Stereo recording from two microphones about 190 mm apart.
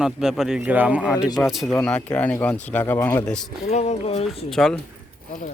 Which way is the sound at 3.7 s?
35° left (ahead or behind).